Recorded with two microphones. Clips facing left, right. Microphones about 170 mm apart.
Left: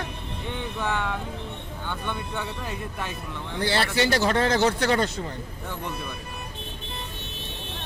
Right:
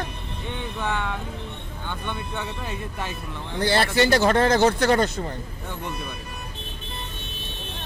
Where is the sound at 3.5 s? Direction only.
45° right (ahead or behind).